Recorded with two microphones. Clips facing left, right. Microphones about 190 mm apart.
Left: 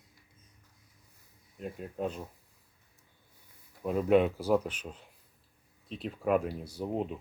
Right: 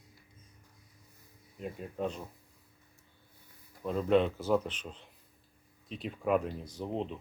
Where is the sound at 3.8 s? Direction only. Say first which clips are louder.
Left 2 dB; 10° left (ahead or behind).